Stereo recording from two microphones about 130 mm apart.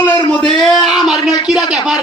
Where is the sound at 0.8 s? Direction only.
Centre (ahead or behind).